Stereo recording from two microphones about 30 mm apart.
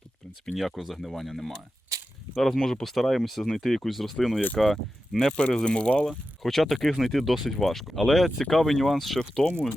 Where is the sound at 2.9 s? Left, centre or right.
Centre.